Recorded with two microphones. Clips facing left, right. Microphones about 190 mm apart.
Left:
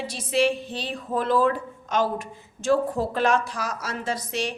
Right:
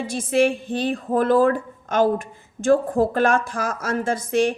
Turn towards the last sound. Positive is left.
turn(degrees=-50)  # may be behind; listen again after turning